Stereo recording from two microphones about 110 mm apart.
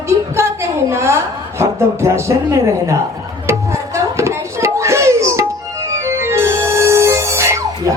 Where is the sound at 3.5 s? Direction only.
25° right (ahead or behind).